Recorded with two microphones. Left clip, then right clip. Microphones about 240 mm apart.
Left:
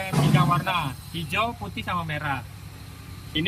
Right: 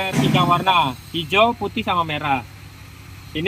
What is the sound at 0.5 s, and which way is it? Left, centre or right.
Speech, right.